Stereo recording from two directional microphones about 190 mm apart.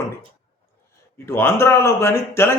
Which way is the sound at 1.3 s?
15° left (ahead or behind).